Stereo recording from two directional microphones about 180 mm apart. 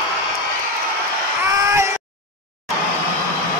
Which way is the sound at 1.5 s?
15° right (ahead or behind).